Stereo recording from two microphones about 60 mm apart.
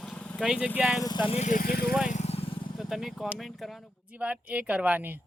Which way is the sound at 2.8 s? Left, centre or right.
Centre.